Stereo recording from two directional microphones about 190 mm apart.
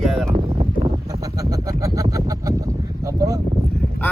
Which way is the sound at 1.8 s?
20° right (ahead or behind).